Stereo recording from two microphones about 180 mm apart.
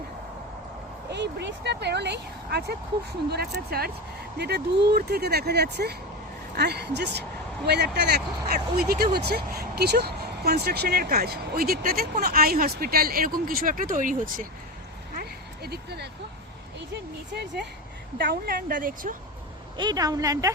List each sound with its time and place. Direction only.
1.1 s speech: 75° right (ahead or behind); by 14.4 s 50° right (ahead or behind)
15.1 s a sound: 60° right (ahead or behind)
16.9 s speech: 70° right (ahead or behind)
18.2 s a woman's voice: 55° right (ahead or behind)
19.7 s a woman's voice: 25° right (ahead or behind)